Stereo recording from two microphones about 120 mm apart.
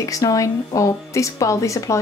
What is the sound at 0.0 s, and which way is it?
Speech, 30° left (ahead or behind).